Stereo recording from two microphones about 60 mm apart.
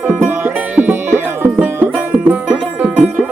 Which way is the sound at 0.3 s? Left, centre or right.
Right.